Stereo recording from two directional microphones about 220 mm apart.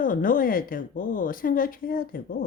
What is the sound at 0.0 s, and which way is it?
Speech, 40° left (ahead or behind).